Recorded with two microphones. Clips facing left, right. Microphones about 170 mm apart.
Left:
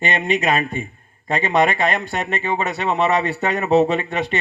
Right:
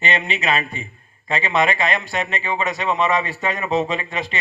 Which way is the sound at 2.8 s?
65° left (ahead or behind).